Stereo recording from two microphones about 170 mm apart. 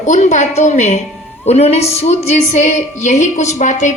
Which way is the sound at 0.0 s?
45° left (ahead or behind).